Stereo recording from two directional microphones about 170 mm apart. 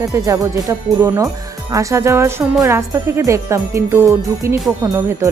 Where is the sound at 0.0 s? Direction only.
20° right (ahead or behind).